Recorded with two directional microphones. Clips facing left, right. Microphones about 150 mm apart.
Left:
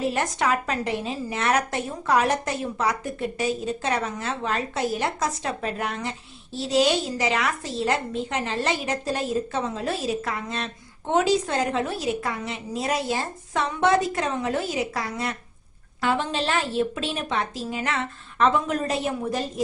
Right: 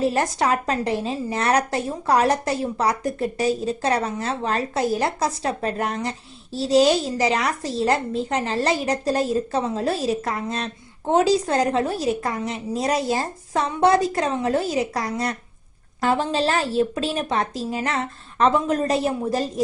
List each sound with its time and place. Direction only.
0.0 s a woman's voice: 35° right (ahead or behind)